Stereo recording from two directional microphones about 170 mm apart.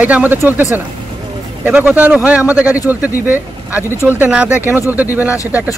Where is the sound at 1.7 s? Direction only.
10° right (ahead or behind).